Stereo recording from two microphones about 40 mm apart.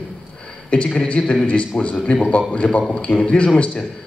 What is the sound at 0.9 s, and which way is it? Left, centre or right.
A man's voice, left.